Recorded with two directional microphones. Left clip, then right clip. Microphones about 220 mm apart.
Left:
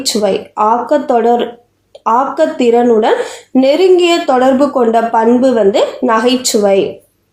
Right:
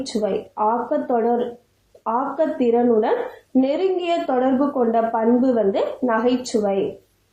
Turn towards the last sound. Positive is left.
turn(degrees=45)  # may be behind; listen again after turning